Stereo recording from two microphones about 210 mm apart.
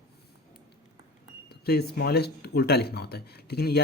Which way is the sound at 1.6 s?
50° left (ahead or behind).